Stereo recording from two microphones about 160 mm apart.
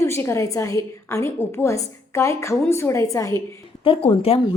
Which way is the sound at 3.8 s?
35° left (ahead or behind).